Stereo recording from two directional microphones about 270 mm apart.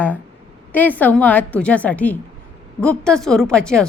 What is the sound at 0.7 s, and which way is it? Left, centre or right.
A woman's voice, centre.